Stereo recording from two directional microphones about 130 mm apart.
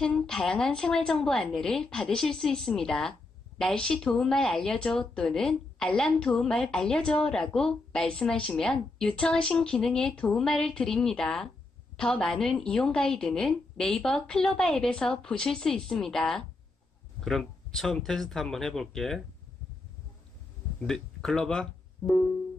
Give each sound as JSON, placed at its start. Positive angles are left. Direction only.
{"t": 0.0, "sound": "a woman's voice", "side_deg": 5}
{"t": 20.8, "sound": "speech", "side_deg": 5}